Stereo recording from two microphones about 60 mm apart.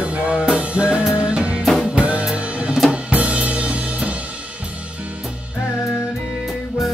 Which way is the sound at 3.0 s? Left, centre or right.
Right.